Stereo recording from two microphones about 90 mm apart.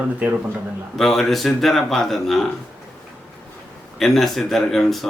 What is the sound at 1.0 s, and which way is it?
Speech, 5° left (ahead or behind).